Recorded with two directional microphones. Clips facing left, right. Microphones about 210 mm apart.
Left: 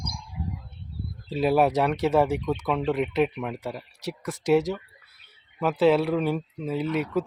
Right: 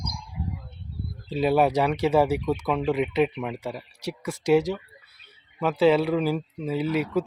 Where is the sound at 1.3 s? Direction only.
Centre (ahead or behind).